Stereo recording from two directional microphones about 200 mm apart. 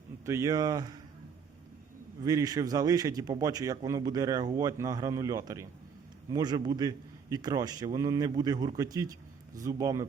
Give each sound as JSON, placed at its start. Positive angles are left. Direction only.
{"t": 0.3, "sound": "a man's voice", "side_deg": -15}
{"t": 2.2, "sound": "a man's voice", "side_deg": -20}